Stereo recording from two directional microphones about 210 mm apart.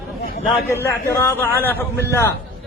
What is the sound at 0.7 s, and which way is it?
A man's voice, 15° left (ahead or behind).